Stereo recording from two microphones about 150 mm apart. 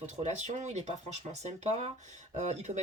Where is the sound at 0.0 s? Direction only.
50° right (ahead or behind).